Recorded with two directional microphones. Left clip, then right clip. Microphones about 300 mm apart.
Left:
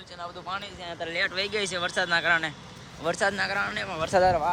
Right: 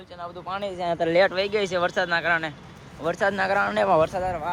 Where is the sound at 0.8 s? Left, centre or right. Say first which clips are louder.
Right 11 dB; centre.